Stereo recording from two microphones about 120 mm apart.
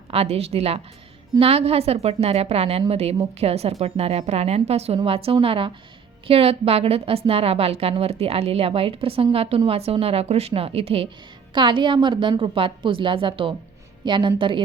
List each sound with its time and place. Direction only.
0.1 s a woman's voice: 55° right (ahead or behind)
11.5 s a woman's voice: 40° right (ahead or behind)